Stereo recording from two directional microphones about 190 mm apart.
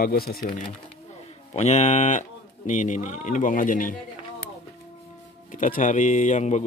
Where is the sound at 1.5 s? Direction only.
35° left (ahead or behind).